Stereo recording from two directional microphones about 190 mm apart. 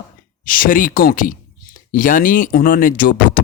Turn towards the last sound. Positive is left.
turn(degrees=50)  # may be behind; listen again after turning